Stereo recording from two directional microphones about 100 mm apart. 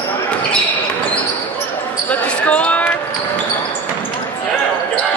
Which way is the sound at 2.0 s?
15° left (ahead or behind).